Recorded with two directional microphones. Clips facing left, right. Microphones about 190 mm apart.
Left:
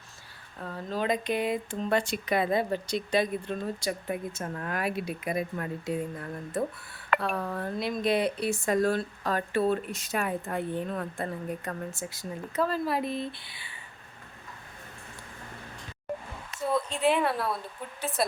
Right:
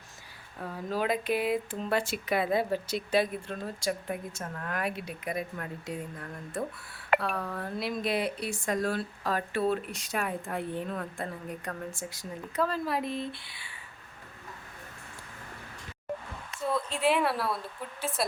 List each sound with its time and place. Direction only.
0.6 s speech: 10° right (ahead or behind); by 5.1 s 5° left (ahead or behind)
5.2 s speech: 30° left (ahead or behind)
6.5 s speech: centre (ahead or behind)
16.6 s speech: centre (ahead or behind)